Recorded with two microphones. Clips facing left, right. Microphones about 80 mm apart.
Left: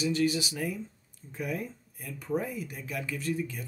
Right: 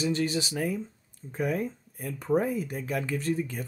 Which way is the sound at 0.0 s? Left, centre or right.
Right.